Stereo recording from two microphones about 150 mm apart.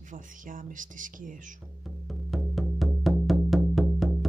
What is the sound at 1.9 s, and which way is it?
Music, centre (ahead or behind).